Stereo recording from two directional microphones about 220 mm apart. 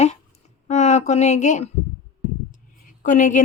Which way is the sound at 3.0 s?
35° left (ahead or behind).